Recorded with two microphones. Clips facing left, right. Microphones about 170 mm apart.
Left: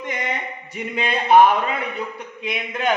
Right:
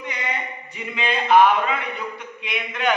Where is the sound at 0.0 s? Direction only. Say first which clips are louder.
Left 3 dB; 45° left (ahead or behind).